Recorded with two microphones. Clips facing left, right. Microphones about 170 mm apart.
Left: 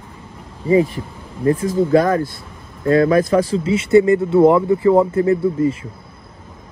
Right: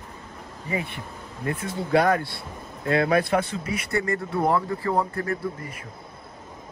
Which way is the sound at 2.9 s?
40° left (ahead or behind).